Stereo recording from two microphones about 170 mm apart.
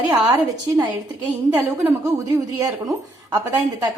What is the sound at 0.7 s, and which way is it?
A woman's voice, 20° right (ahead or behind).